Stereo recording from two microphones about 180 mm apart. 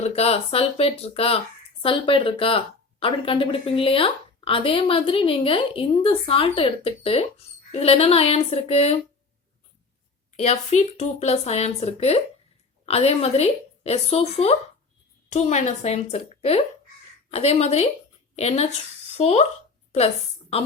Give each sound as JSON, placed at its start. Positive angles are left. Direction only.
{"t": 0.0, "sound": "speech", "side_deg": 35}
{"t": 10.3, "sound": "speech", "side_deg": 40}